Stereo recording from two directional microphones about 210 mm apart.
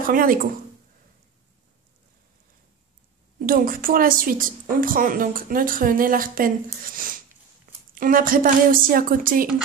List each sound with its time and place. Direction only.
0.0 s speech: 40° right (ahead or behind)
3.3 s a woman's voice: 45° right (ahead or behind)